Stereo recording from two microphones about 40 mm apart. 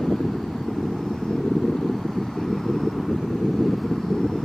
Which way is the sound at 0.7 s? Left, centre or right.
Centre.